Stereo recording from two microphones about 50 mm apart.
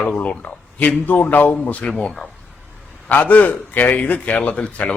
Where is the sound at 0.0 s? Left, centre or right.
Left.